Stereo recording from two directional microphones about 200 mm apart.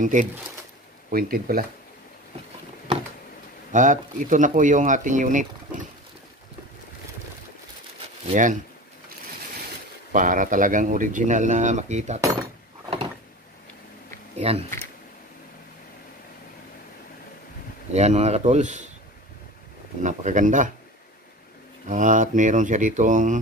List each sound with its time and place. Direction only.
0.0 s speech: 40° right (ahead or behind)
3.7 s speech: 40° right (ahead or behind)
8.3 s speech: 40° right (ahead or behind)
10.1 s speech: 40° right (ahead or behind)
14.4 s speech: 30° right (ahead or behind)
17.9 s speech: 35° right (ahead or behind)
20.0 s speech: 40° right (ahead or behind)
21.8 s speech: 40° right (ahead or behind)